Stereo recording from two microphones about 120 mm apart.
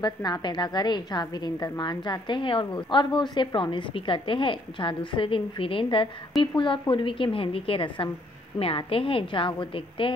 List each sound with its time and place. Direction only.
0.0 s a woman's voice: 35° left (ahead or behind)